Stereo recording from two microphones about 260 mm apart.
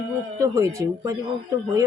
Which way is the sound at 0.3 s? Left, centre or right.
Centre.